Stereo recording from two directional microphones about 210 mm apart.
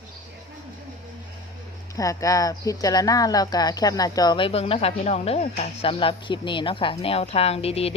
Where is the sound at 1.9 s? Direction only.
15° left (ahead or behind).